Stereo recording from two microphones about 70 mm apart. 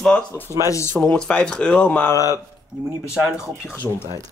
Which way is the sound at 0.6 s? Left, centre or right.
Left.